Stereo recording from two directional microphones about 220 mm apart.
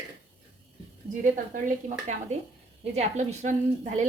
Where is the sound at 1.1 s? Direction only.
35° right (ahead or behind).